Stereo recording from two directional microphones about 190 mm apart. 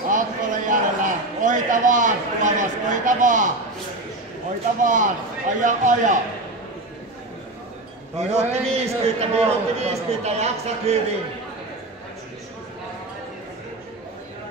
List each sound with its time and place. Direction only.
0.1 s a sound: 45° right (ahead or behind)
4.8 s a man's voice: 40° right (ahead or behind)
8.2 s a man's voice: 35° right (ahead or behind)